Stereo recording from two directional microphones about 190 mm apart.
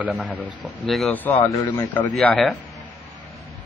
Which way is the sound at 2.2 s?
Centre (ahead or behind).